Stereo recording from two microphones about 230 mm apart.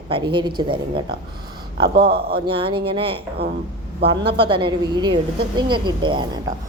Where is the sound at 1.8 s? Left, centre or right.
Right.